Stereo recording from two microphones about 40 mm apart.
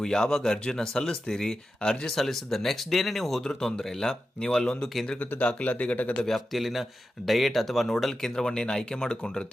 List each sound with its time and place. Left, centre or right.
0.0 s speech: centre
5.4 s speech: left
6.2 s speech: centre